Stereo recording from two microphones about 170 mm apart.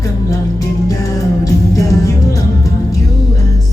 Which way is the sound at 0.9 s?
20° left (ahead or behind).